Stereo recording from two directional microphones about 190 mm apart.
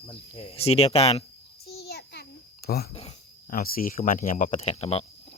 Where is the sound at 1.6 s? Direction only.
55° left (ahead or behind).